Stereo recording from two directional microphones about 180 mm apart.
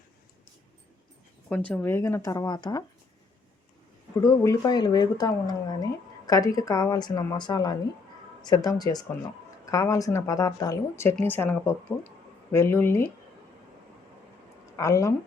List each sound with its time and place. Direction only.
1.5 s speech: 10° left (ahead or behind)
4.2 s speech: 20° left (ahead or behind)
14.8 s speech: 15° left (ahead or behind)